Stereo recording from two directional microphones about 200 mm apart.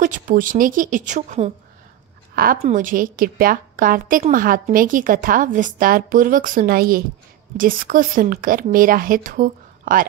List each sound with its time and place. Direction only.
0.0 s speech: 40° right (ahead or behind)
2.3 s a woman's voice: 45° right (ahead or behind)